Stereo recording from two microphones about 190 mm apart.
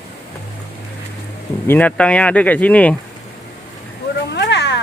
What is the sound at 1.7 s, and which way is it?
Speech, 5° left (ahead or behind).